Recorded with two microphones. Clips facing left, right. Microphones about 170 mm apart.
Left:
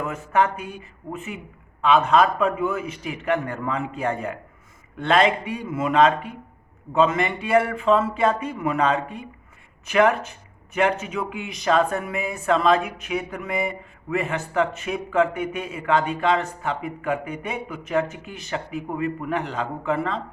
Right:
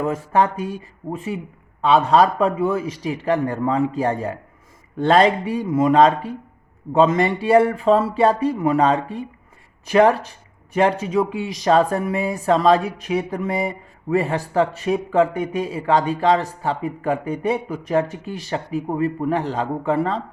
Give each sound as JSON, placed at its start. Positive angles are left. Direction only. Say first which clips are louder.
{"t": 0.0, "sound": "speech", "louder": "right 3 dB", "side_deg": -35}